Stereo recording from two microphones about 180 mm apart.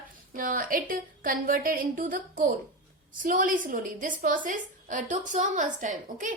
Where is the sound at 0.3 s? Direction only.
50° right (ahead or behind).